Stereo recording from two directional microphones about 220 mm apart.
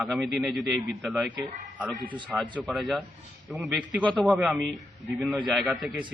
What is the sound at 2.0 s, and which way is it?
Speech, 20° right (ahead or behind).